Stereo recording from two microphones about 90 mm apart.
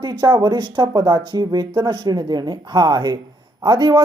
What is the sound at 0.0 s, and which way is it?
Speech, 50° right (ahead or behind).